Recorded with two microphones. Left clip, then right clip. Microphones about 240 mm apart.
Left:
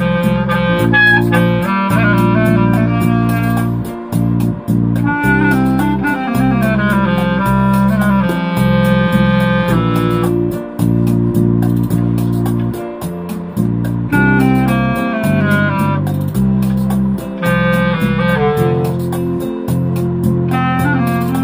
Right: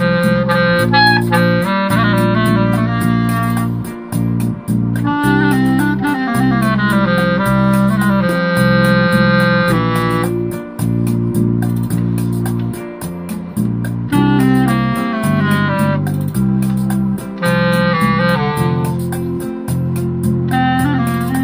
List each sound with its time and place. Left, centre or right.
0.9 s music: right
6.6 s music: centre
17.5 s music: right